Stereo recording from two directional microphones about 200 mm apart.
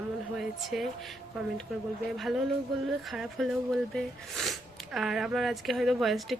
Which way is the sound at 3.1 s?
Centre (ahead or behind).